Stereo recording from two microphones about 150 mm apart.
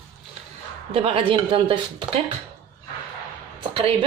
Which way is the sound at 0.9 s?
40° right (ahead or behind).